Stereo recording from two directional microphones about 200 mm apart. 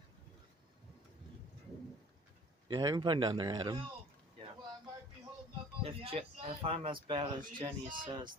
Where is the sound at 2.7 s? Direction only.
20° right (ahead or behind).